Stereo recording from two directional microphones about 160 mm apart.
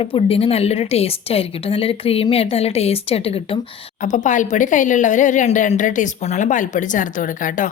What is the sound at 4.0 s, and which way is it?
A woman's voice, 50° left (ahead or behind).